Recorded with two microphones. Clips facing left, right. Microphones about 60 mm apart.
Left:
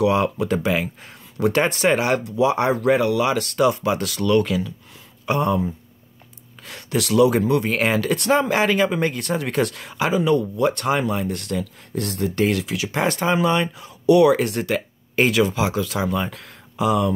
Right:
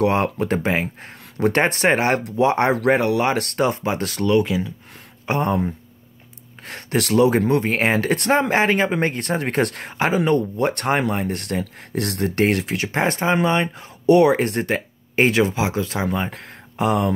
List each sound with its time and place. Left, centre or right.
0.0 s speech: right
4.3 s speech: right
6.6 s speech: right
16.7 s speech: right